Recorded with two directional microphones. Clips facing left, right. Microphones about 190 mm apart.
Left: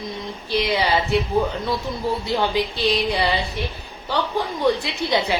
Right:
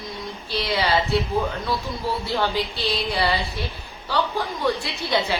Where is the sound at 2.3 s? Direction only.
15° left (ahead or behind).